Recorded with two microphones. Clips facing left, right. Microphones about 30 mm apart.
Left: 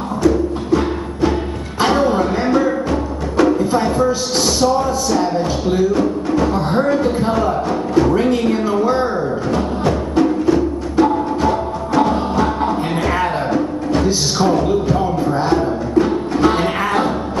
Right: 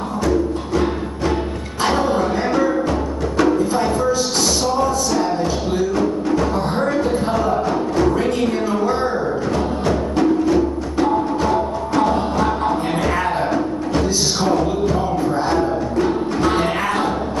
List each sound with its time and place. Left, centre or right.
0.2 s music: centre
4.6 s music: centre
8.1 s music: centre